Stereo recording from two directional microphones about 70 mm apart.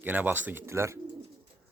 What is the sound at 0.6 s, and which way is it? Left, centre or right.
Speech, right.